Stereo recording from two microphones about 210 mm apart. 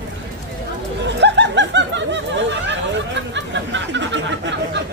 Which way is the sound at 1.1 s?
55° right (ahead or behind).